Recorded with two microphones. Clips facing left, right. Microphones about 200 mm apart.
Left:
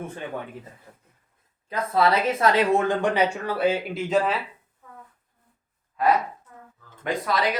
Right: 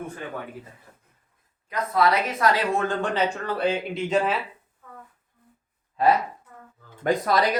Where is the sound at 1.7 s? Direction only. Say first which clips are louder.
Left 1 dB; 30° left (ahead or behind).